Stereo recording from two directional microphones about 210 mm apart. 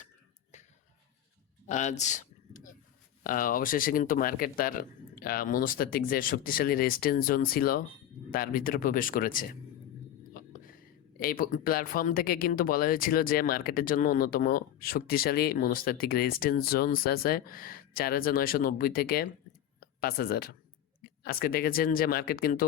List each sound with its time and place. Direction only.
0.5 s finger snapping: 35° left (ahead or behind)
1.6 s a sound: 35° left (ahead or behind)
3.2 s speech: 40° left (ahead or behind)
11.2 s speech: 45° left (ahead or behind)